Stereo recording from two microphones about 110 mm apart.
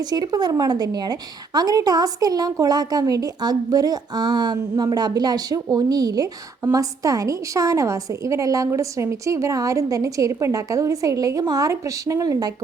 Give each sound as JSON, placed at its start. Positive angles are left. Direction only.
{"t": 0.1, "sound": "a woman's voice", "side_deg": -35}